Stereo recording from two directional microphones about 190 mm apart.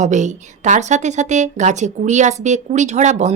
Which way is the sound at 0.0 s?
40° right (ahead or behind).